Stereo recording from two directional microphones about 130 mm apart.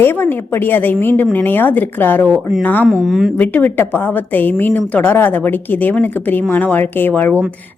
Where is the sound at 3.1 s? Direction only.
Centre (ahead or behind).